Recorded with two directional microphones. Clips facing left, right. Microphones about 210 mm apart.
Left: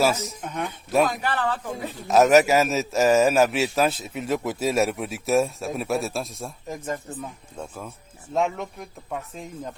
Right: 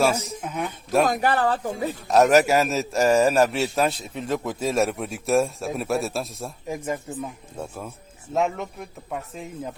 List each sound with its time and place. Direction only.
0.0 s a man's voice: centre (ahead or behind)
1.0 s a man's voice: 45° right (ahead or behind)
2.0 s a man's voice: centre (ahead or behind)